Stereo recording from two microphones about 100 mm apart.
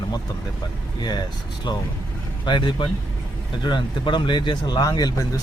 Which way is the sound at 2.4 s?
50° left (ahead or behind).